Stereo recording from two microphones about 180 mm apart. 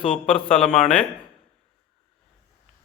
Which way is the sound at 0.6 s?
Centre (ahead or behind).